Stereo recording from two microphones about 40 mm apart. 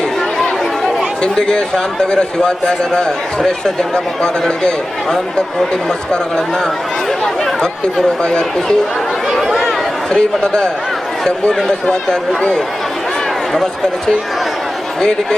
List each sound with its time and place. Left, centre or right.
1.2 s speech: left
7.6 s speech: centre
9.3 s chatter: centre
9.6 s a sound: centre
11.3 s speech: left